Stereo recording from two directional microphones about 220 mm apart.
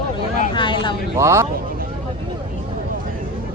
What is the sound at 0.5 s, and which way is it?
Speech, 20° left (ahead or behind).